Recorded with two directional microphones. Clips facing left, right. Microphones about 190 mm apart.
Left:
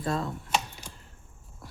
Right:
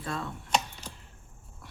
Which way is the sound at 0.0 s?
40° left (ahead or behind).